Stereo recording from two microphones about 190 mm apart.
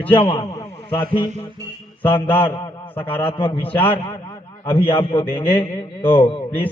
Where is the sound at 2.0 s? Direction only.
10° left (ahead or behind).